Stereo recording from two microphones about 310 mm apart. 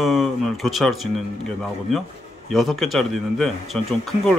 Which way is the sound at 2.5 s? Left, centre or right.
Centre.